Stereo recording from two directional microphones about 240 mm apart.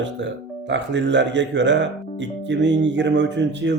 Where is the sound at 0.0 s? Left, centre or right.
Right.